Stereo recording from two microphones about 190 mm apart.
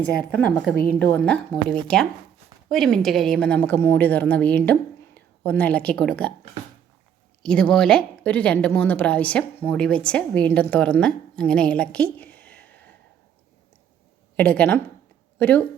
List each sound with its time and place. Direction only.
0.0 s a woman's voice: 5° left (ahead or behind)
7.4 s a woman's voice: 5° left (ahead or behind)
14.3 s a woman's voice: 5° left (ahead or behind)